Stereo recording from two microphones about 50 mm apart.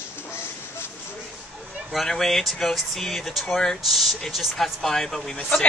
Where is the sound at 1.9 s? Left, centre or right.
Centre.